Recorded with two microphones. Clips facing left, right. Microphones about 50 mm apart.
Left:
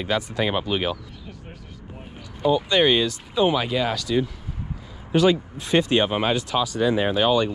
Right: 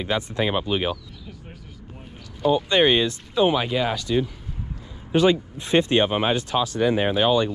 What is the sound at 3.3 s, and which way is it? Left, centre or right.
Speech, centre.